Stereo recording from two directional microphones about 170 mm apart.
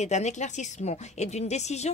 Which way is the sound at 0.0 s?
45° left (ahead or behind).